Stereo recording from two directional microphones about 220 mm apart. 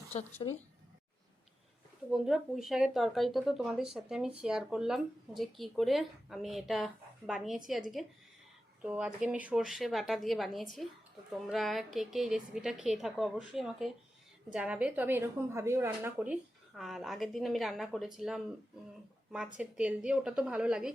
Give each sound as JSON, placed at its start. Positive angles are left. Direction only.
{"t": 0.4, "sound": "speech", "side_deg": 20}
{"t": 2.0, "sound": "a woman's voice", "side_deg": 0}
{"t": 19.5, "sound": "a woman's voice", "side_deg": -5}